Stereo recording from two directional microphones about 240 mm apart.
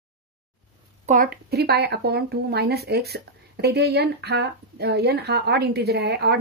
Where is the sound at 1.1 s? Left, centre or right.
Right.